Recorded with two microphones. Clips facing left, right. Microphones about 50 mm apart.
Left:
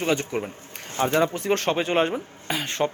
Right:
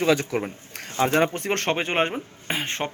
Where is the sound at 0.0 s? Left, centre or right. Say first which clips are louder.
Right 3 dB; right.